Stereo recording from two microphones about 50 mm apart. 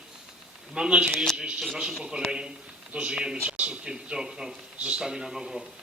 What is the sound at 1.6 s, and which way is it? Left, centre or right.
Speech, centre.